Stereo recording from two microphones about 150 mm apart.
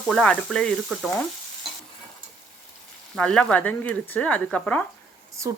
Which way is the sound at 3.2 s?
5° left (ahead or behind).